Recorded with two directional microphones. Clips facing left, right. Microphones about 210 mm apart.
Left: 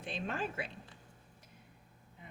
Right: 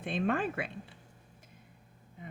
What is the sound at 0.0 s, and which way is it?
Speech, 55° right (ahead or behind).